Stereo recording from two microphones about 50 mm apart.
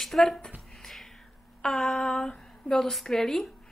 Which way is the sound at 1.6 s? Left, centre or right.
Centre.